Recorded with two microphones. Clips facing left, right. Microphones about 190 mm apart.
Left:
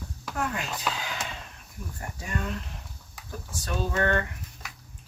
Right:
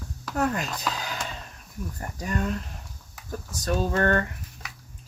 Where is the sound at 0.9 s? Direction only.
40° right (ahead or behind).